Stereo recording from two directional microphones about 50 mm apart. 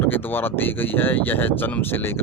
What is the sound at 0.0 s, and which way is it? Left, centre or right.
Speech, left.